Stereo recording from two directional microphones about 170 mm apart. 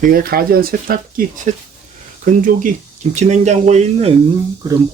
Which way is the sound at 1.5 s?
50° right (ahead or behind).